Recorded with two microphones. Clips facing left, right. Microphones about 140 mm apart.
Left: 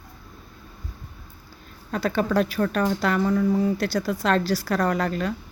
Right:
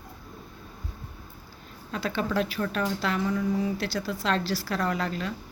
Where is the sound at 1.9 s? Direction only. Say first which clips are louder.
Left 5 dB; 45° left (ahead or behind).